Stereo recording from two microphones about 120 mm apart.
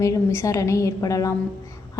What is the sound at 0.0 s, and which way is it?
A woman's voice, 25° left (ahead or behind).